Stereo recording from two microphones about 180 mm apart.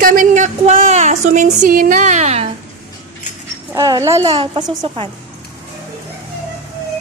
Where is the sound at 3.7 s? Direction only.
20° right (ahead or behind).